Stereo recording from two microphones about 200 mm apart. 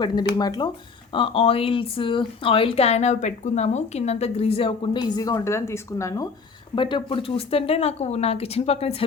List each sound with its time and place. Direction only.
0.3 s speech: 20° left (ahead or behind)